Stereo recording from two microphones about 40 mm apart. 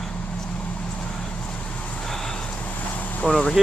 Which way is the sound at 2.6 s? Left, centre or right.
Left.